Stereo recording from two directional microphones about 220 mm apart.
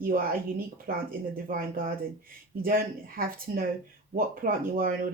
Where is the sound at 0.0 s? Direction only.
40° right (ahead or behind).